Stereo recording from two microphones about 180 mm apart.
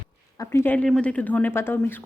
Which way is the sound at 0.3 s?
15° left (ahead or behind).